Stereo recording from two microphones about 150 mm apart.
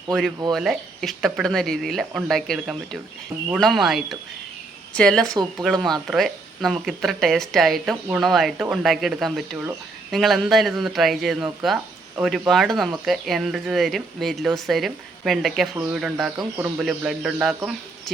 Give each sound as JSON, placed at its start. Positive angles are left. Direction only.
{"t": 0.1, "sound": "speech", "side_deg": 5}
{"t": 5.3, "sound": "speech", "side_deg": -25}
{"t": 5.6, "sound": "speech", "side_deg": 0}